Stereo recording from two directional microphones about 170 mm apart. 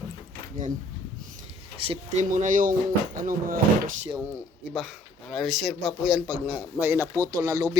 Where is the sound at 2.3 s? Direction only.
50° right (ahead or behind).